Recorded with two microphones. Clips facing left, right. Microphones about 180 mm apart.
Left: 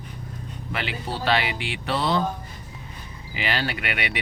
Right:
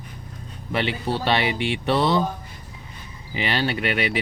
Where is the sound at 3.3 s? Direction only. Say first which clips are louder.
Right 4 dB; 30° right (ahead or behind).